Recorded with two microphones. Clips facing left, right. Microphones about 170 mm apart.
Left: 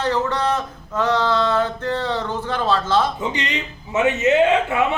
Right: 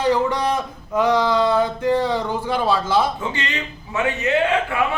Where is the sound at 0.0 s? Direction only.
10° right (ahead or behind).